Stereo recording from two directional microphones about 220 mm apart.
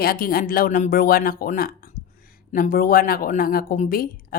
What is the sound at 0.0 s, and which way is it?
A woman's voice, 40° left (ahead or behind).